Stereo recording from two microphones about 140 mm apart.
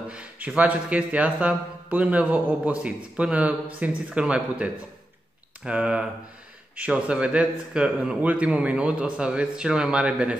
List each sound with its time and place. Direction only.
0.1 s speech: 10° right (ahead or behind)